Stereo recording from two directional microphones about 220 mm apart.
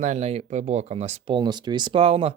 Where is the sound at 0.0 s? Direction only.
30° right (ahead or behind).